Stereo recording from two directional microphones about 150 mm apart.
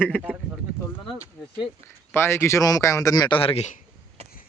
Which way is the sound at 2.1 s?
15° left (ahead or behind).